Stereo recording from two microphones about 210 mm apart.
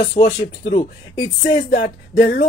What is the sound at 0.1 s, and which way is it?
Speech, 35° left (ahead or behind).